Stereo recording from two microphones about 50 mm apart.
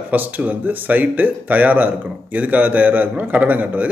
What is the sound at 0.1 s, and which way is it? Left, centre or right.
Speech, right.